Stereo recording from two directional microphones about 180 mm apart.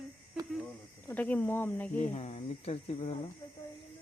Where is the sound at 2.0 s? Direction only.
35° left (ahead or behind).